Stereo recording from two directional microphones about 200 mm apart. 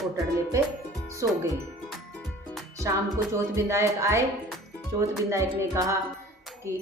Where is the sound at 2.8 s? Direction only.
15° right (ahead or behind).